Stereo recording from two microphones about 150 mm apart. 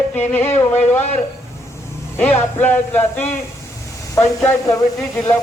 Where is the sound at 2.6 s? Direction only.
10° left (ahead or behind).